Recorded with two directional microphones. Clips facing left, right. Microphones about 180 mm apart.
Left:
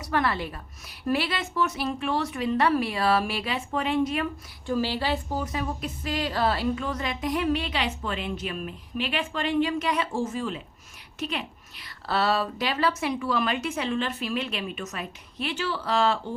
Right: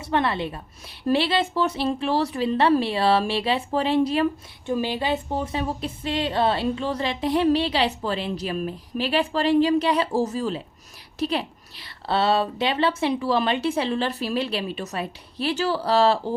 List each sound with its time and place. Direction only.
0.0 s a woman's voice: 25° right (ahead or behind)
4.7 s speech: 20° right (ahead or behind); by 16.3 s 35° right (ahead or behind)